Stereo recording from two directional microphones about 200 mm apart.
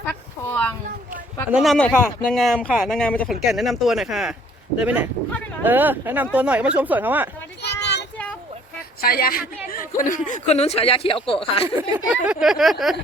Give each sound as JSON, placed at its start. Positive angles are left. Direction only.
{"t": 0.0, "sound": "a sound", "side_deg": 10}
{"t": 1.5, "sound": "speech", "side_deg": 0}
{"t": 7.6, "sound": "child singing", "side_deg": 60}
{"t": 9.0, "sound": "a man's voice", "side_deg": 50}
{"t": 11.8, "sound": "speech", "side_deg": -5}